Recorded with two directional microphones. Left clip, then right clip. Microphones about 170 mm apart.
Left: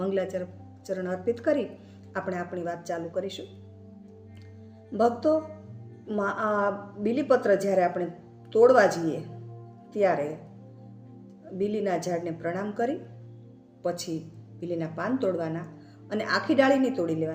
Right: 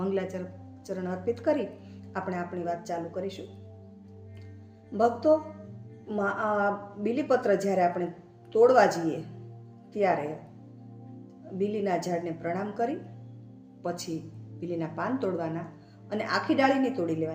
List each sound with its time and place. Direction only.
0.0 s a woman's voice: 15° left (ahead or behind)
4.9 s a woman's voice: 10° left (ahead or behind)
11.5 s a woman's voice: 15° left (ahead or behind)
14.6 s a woman's voice: 15° left (ahead or behind)